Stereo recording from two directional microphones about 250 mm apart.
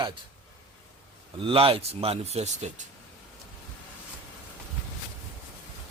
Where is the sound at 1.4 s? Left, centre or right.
Right.